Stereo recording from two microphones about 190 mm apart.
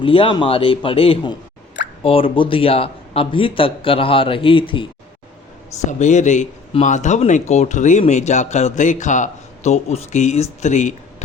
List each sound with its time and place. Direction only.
0.0 s a man's voice: 30° left (ahead or behind)
6.0 s speech: 40° left (ahead or behind)